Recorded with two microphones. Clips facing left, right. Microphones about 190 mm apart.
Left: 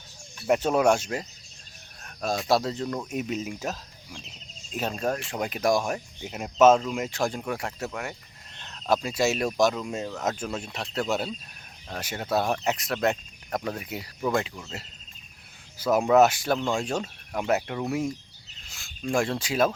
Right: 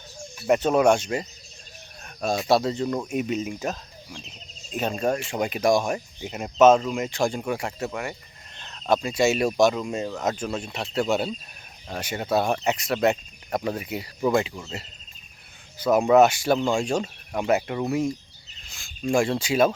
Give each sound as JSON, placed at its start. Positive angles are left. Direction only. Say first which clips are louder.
{"t": 0.4, "sound": "speech", "louder": "right 3 dB", "side_deg": 0}